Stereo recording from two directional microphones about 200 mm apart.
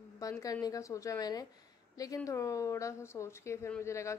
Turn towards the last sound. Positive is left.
turn(degrees=15)  # may be behind; listen again after turning